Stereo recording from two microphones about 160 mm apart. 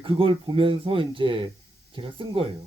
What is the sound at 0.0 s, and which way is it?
Speech, 35° right (ahead or behind).